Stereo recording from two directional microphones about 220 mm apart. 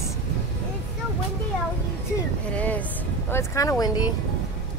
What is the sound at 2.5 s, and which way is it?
Speech, 5° left (ahead or behind).